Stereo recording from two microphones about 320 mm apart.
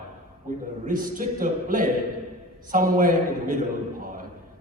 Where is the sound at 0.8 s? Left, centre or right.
Right.